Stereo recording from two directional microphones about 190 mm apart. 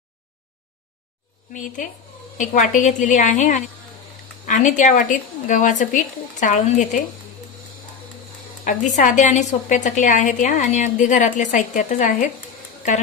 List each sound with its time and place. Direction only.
1.5 s a woman's voice: 40° left (ahead or behind)
8.6 s a woman's voice: 45° left (ahead or behind)